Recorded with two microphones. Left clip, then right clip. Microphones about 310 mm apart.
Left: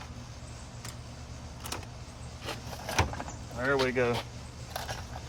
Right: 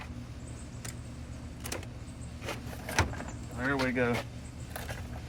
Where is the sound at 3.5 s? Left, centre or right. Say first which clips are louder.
Left 3 dB; centre.